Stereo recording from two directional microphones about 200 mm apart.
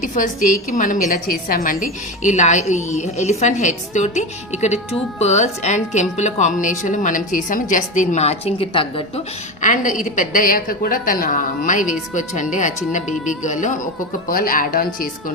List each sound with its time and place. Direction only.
0.0 s a woman's voice: 40° left (ahead or behind)